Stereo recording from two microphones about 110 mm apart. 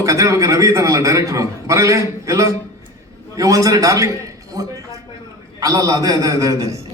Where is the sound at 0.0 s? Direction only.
30° right (ahead or behind).